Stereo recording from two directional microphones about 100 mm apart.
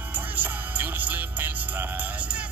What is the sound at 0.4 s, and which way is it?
Music, 20° right (ahead or behind).